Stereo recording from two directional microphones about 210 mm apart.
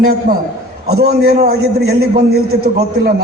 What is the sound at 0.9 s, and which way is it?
A man's voice, 50° right (ahead or behind).